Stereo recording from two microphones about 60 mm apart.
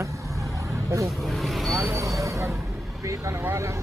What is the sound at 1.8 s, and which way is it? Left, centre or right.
Speech, right.